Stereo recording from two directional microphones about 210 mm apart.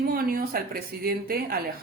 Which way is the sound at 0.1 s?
45° right (ahead or behind).